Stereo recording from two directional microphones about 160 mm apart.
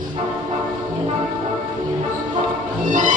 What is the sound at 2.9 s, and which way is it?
Music, 55° right (ahead or behind).